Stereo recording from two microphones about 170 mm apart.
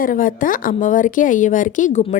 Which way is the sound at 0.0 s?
55° left (ahead or behind).